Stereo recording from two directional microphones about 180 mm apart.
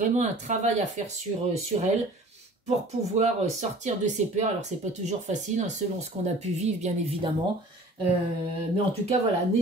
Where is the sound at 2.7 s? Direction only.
40° right (ahead or behind).